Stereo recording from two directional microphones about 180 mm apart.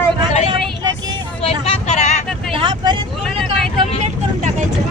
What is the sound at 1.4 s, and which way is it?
Vehicle, 35° left (ahead or behind).